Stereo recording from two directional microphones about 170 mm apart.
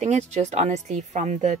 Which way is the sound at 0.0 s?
40° right (ahead or behind).